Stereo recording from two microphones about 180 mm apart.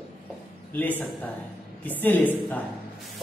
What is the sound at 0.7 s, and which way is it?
A man's voice, 10° left (ahead or behind).